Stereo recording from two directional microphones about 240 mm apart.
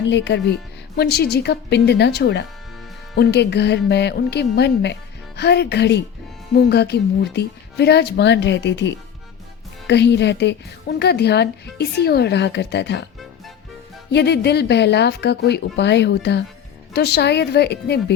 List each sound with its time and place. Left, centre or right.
0.1 s a woman's voice: left
14.1 s a woman's voice: left